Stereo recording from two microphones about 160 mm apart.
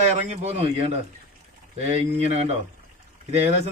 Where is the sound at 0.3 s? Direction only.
40° right (ahead or behind).